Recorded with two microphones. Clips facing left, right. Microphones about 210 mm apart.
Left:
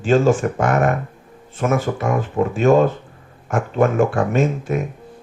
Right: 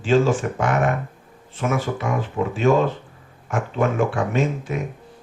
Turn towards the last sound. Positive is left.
turn(degrees=45)  # may be behind; listen again after turning